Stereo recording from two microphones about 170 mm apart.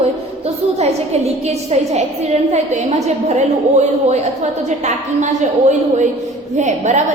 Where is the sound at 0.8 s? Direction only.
40° right (ahead or behind).